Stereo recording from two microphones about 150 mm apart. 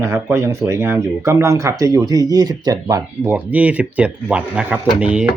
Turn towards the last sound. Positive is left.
turn(degrees=-10)  # may be behind; listen again after turning